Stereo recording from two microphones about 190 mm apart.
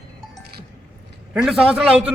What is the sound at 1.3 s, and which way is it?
Speech, 5° right (ahead or behind).